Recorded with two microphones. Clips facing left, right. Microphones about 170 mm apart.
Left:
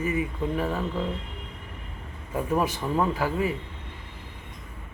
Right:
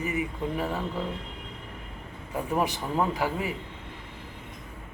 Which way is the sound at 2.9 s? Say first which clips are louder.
Left 2 dB; 15° right (ahead or behind).